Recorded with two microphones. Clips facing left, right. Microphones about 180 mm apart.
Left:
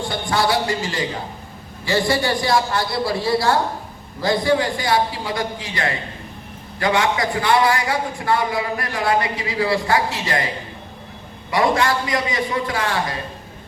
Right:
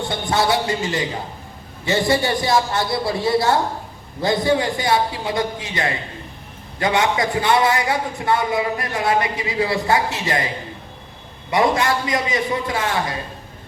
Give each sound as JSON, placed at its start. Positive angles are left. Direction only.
{"t": 0.1, "sound": "a man's voice", "side_deg": -25}
{"t": 11.5, "sound": "a man's voice", "side_deg": -20}